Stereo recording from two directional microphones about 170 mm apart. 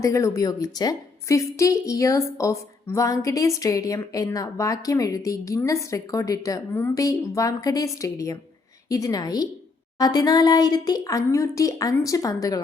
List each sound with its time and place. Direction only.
0.0 s a woman's voice: 15° left (ahead or behind)